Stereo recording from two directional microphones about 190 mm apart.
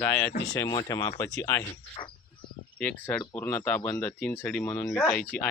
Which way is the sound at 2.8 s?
5° left (ahead or behind).